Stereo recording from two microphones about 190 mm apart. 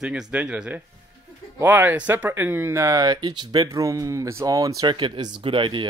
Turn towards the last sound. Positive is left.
turn(degrees=-25)  # may be behind; listen again after turning